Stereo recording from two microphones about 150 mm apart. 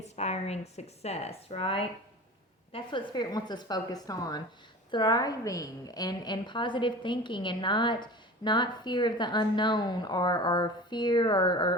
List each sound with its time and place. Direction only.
0.0 s a woman's voice: 45° left (ahead or behind); by 11.7 s 30° left (ahead or behind)